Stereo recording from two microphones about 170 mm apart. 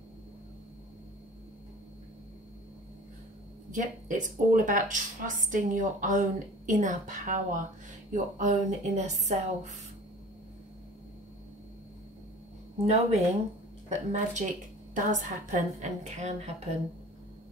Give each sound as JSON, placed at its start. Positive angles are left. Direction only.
{"t": 3.7, "sound": "a woman's voice", "side_deg": -50}
{"t": 12.8, "sound": "a woman's voice", "side_deg": -40}